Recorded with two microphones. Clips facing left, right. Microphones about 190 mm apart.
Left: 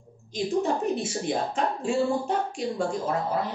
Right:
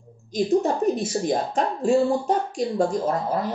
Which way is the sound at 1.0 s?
40° right (ahead or behind).